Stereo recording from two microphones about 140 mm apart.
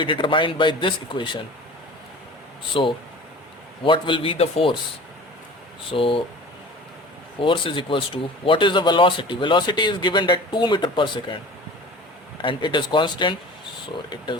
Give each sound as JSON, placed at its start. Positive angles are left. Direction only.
{"t": 0.0, "sound": "speech", "side_deg": 35}
{"t": 2.8, "sound": "speech", "side_deg": 40}
{"t": 5.9, "sound": "speech", "side_deg": 40}
{"t": 7.3, "sound": "speech", "side_deg": 35}
{"t": 12.4, "sound": "speech", "side_deg": 35}